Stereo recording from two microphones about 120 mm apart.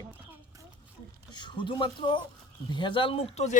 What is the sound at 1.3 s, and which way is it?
Speech, 40° left (ahead or behind).